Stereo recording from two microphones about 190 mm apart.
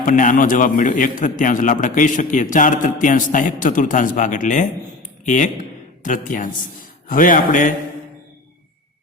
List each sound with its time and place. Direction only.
0.0 s a man's voice: 45° left (ahead or behind)